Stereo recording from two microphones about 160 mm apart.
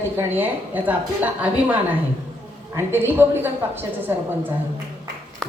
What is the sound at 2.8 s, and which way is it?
A woman's voice, 15° right (ahead or behind).